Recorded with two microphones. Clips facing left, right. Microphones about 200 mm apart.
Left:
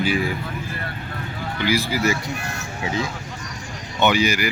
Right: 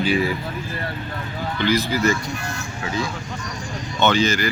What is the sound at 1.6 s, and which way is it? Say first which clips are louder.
Speech: right 1 dB; 10° left (ahead or behind).